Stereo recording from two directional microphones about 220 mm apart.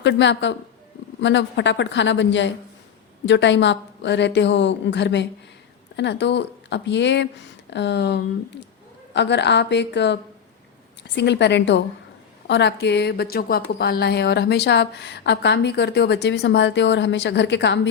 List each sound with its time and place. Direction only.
0.0 s a woman's voice: 55° left (ahead or behind)